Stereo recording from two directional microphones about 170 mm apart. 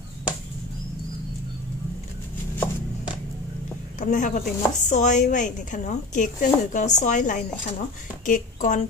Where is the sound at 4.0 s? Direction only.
50° left (ahead or behind).